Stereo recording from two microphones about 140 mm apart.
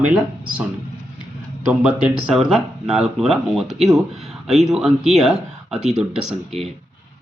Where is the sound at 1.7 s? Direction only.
10° right (ahead or behind).